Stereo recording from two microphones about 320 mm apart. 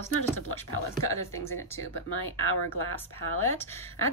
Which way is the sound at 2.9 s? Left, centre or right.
Centre.